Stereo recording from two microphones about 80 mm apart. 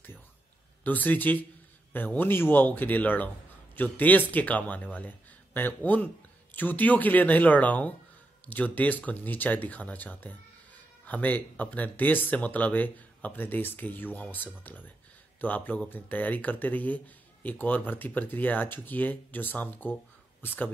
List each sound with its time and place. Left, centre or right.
0.8 s speech: left